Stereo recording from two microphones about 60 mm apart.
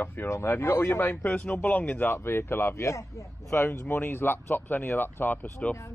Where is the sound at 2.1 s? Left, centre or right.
Left.